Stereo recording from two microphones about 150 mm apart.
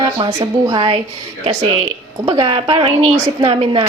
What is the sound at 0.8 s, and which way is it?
Speech, 40° right (ahead or behind).